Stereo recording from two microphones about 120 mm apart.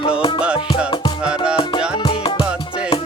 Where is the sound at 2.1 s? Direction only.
45° left (ahead or behind).